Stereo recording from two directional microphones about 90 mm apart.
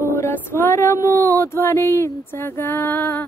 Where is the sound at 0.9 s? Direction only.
25° left (ahead or behind).